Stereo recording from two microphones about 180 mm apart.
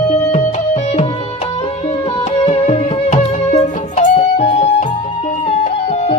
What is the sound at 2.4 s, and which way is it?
Music, 35° left (ahead or behind).